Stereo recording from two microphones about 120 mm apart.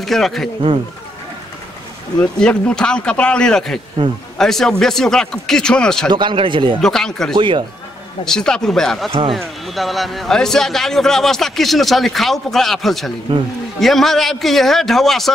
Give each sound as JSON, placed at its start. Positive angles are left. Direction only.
{"t": 0.0, "sound": "a man's voice", "side_deg": 0}
{"t": 2.1, "sound": "a man's voice", "side_deg": 5}
{"t": 6.1, "sound": "speech", "side_deg": -45}
{"t": 6.8, "sound": "a man's voice", "side_deg": 5}
{"t": 7.3, "sound": "speech", "side_deg": -40}
{"t": 8.3, "sound": "a man's voice", "side_deg": 5}